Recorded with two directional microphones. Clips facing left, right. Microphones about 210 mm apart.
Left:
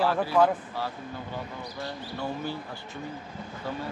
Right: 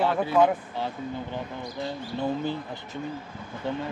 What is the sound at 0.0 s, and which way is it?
Speech, 20° right (ahead or behind).